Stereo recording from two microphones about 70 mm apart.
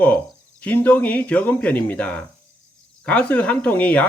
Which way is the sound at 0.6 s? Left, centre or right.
Left.